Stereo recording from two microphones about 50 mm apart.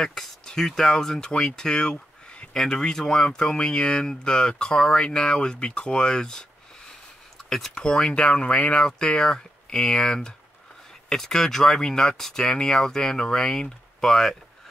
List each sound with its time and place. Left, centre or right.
0.0 s speech: centre
7.4 s speech: centre